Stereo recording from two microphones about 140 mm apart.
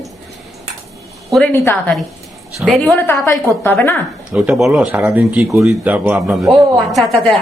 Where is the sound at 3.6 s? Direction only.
15° left (ahead or behind).